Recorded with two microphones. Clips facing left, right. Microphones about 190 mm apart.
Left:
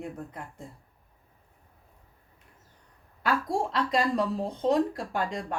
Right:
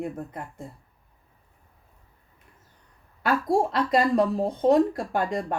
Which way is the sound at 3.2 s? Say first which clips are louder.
Right 5 dB; 50° right (ahead or behind).